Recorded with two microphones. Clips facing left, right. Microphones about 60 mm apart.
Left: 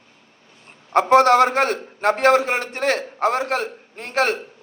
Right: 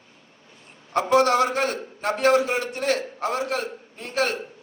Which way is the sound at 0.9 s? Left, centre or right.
Left.